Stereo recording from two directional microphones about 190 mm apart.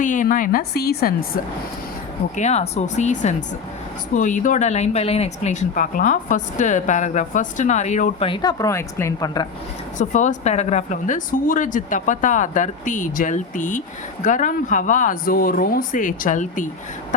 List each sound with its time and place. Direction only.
0.0 s speech: 45° left (ahead or behind)
2.3 s speech: 35° left (ahead or behind)
8.3 s a woman's voice: 20° left (ahead or behind)
10.0 s speech: 40° left (ahead or behind)